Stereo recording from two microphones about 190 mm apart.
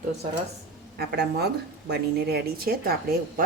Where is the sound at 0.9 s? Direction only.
60° right (ahead or behind).